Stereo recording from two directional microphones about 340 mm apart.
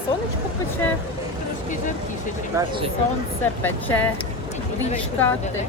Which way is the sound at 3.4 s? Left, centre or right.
Centre.